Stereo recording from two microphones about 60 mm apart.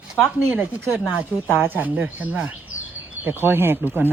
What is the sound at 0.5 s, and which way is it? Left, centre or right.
Speech, right.